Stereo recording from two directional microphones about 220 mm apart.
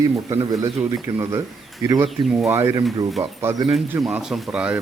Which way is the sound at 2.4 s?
10° right (ahead or behind).